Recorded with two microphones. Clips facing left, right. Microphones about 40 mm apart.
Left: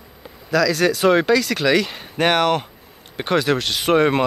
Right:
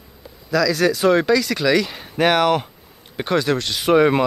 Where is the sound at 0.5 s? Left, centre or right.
Centre.